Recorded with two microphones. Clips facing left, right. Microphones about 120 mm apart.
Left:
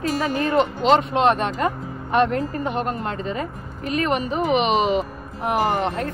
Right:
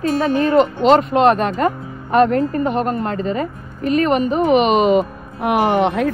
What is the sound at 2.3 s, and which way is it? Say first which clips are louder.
Speech: right 7 dB; 45° right (ahead or behind).